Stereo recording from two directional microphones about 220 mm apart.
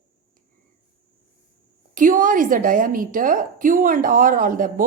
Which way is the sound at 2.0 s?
35° right (ahead or behind).